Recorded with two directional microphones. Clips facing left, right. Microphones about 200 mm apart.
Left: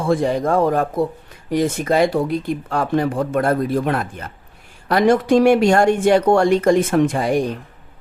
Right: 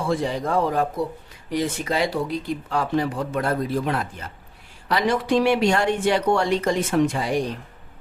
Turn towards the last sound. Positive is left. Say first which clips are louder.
# left 4 dB
turn(degrees=50)  # may be behind; listen again after turning